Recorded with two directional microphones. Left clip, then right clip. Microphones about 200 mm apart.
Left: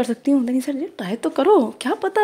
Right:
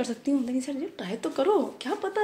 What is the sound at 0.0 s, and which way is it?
Speech, 45° left (ahead or behind).